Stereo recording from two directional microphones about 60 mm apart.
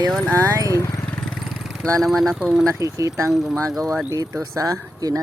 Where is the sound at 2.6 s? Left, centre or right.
Right.